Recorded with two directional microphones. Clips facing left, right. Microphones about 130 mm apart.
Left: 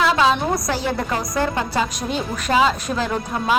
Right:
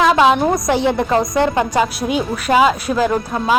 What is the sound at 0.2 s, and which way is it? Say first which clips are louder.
A woman's voice: right 5 dB; 20° right (ahead or behind).